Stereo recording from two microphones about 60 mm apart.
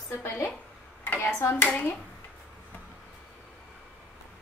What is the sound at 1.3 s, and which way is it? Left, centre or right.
Hands, left.